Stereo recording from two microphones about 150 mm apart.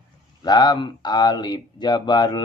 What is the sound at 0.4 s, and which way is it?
Speech, 30° left (ahead or behind).